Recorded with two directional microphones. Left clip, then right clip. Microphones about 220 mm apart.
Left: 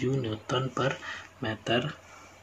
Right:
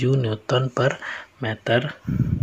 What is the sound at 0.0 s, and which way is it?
Speech, 35° right (ahead or behind).